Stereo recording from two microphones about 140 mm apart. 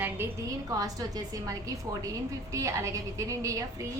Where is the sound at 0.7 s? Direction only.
25° right (ahead or behind).